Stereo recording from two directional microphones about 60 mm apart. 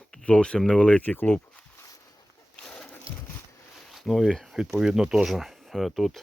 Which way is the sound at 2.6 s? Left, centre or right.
Centre.